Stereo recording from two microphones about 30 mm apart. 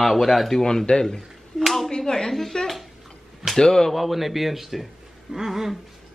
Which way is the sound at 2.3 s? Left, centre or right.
Centre.